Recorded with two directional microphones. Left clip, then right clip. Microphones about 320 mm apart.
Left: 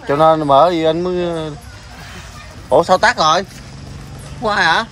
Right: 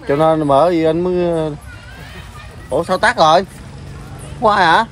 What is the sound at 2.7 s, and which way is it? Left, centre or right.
Speech, centre.